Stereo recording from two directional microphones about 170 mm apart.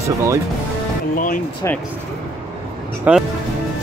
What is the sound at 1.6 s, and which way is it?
Speech, 15° left (ahead or behind).